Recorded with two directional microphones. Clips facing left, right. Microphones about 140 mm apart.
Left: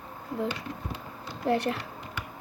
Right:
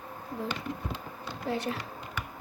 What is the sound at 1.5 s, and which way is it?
Speech, 65° left (ahead or behind).